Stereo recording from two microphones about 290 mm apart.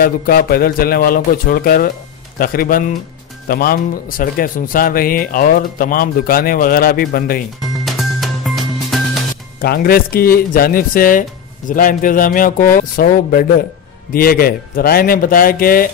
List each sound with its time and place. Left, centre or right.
0.0 s a man's voice: left
7.8 s music: centre
9.6 s speech: left